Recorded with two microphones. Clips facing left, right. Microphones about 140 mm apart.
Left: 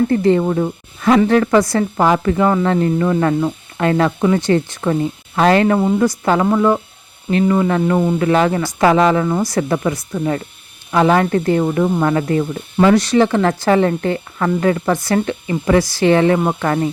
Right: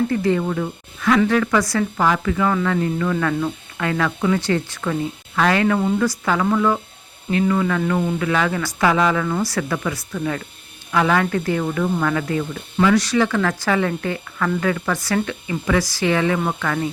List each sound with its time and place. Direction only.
0.1 s speech: 35° left (ahead or behind); by 10.2 s 20° left (ahead or behind)
10.9 s speech: 30° left (ahead or behind)
11.6 s speech: 25° left (ahead or behind)